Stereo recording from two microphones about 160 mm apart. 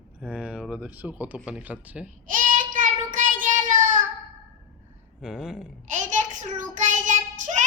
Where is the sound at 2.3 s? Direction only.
55° right (ahead or behind).